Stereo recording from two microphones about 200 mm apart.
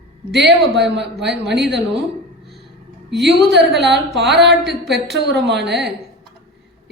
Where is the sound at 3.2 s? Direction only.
55° right (ahead or behind).